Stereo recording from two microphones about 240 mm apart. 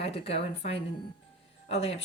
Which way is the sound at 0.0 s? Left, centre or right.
Left.